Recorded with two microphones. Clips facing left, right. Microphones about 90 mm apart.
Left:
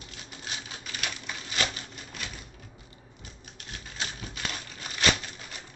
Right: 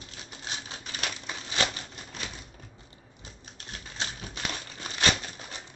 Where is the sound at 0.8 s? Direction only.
35° right (ahead or behind).